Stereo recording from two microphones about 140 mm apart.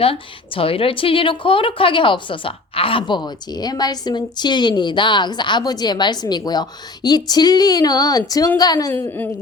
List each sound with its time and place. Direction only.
0.0 s a woman's voice: 40° left (ahead or behind)
8.9 s speech: 15° left (ahead or behind)